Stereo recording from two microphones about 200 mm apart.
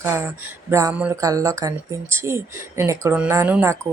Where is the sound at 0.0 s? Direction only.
10° right (ahead or behind).